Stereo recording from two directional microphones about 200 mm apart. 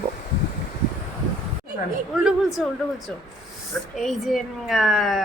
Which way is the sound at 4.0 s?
Centre (ahead or behind).